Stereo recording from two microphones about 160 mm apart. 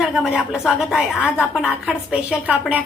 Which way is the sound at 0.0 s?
5° right (ahead or behind).